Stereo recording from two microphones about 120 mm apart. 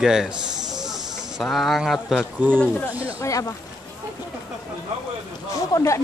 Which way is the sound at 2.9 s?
10° right (ahead or behind).